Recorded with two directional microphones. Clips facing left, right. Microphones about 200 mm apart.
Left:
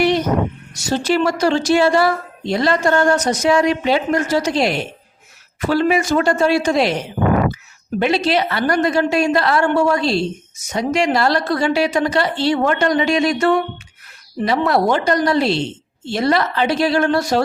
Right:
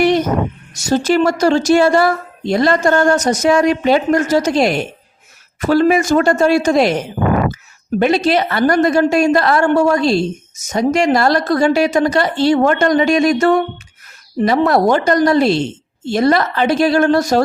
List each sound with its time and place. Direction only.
0.0 s a sound: 50° right (ahead or behind)
0.7 s a woman's voice: 45° right (ahead or behind)
7.9 s a woman's voice: 45° right (ahead or behind)